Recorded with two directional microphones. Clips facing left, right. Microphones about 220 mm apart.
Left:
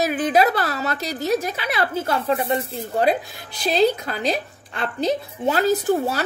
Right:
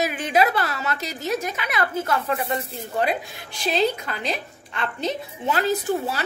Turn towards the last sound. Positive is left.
turn(degrees=40)  # may be behind; listen again after turning